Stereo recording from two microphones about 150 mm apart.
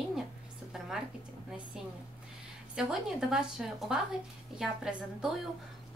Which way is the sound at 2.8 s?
5° right (ahead or behind).